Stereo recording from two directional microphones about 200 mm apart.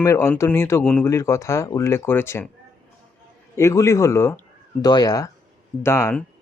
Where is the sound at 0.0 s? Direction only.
10° left (ahead or behind).